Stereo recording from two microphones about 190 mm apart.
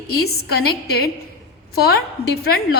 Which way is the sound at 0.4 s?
55° left (ahead or behind).